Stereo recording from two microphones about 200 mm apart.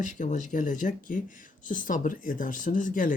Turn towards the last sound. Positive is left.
turn(degrees=40)  # may be behind; listen again after turning